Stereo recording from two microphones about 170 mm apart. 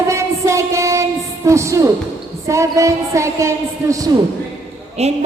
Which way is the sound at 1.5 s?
15° right (ahead or behind).